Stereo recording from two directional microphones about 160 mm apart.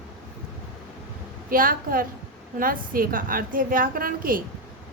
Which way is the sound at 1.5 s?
65° right (ahead or behind).